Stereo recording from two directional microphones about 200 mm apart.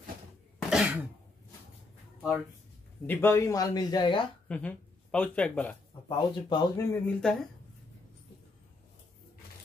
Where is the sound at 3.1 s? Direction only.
10° left (ahead or behind).